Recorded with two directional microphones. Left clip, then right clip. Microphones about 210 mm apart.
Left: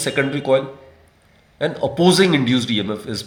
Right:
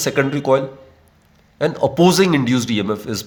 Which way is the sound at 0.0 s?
35° right (ahead or behind).